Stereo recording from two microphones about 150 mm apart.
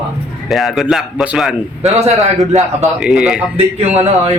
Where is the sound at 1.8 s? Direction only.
45° right (ahead or behind).